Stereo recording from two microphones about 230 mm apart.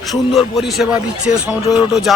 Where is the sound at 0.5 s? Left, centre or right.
Centre.